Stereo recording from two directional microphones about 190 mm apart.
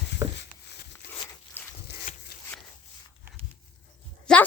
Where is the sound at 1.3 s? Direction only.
10° left (ahead or behind).